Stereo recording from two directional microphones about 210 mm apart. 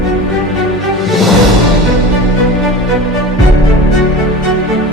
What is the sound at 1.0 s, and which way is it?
Music, centre (ahead or behind).